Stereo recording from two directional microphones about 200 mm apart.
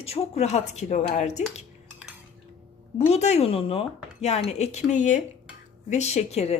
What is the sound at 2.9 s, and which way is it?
Speech, 30° left (ahead or behind).